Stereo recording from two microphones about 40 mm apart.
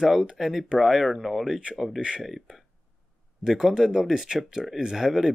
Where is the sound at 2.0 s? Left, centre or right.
Right.